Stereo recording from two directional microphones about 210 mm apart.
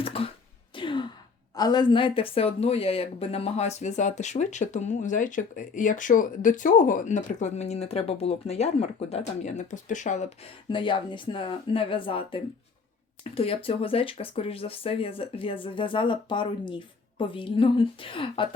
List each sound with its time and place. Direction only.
0.0 s beatboxing: 25° left (ahead or behind)
0.7 s gasp: 25° left (ahead or behind)
1.5 s speech: 20° left (ahead or behind)